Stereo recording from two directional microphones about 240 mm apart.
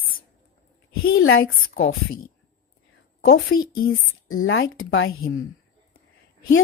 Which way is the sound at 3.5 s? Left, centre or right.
Left.